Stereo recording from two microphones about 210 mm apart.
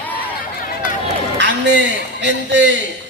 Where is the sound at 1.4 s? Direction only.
55° right (ahead or behind).